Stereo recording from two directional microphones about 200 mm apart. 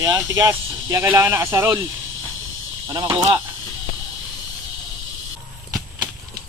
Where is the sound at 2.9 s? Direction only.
15° right (ahead or behind).